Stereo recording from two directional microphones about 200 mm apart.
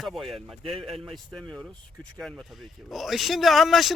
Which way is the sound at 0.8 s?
25° right (ahead or behind).